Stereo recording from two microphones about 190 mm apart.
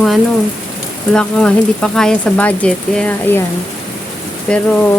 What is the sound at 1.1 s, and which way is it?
Speech, 5° left (ahead or behind).